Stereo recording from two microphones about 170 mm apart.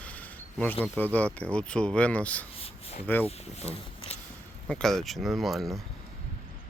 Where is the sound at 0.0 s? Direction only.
10° left (ahead or behind).